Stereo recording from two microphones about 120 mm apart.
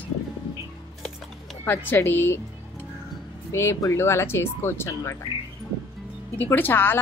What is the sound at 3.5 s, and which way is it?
Speech, 20° left (ahead or behind).